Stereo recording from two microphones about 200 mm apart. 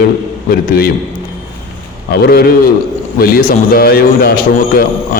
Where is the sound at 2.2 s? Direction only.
50° left (ahead or behind).